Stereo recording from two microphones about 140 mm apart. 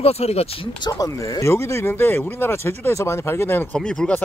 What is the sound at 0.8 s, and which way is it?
Speech, 25° left (ahead or behind).